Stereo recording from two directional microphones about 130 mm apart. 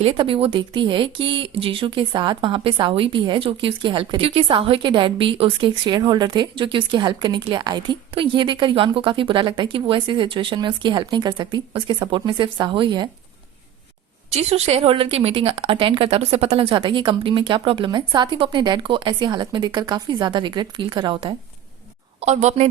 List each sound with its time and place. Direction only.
0.0 s speech: 45° right (ahead or behind)
14.3 s speech: 55° right (ahead or behind)
22.2 s a woman's voice: 60° right (ahead or behind)